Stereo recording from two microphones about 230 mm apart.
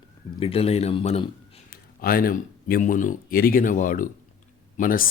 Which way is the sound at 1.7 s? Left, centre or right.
Left.